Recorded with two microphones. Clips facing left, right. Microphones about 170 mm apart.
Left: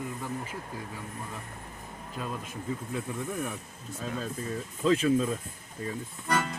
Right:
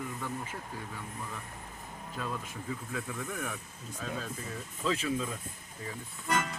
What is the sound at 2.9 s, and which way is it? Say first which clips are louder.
Speech: left 4 dB; 30° left (ahead or behind).